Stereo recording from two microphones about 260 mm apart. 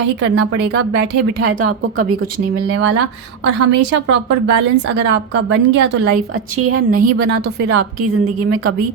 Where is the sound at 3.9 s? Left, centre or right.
Right.